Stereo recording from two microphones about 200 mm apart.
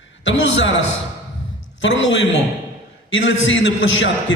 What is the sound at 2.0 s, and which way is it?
A man's voice, 65° left (ahead or behind).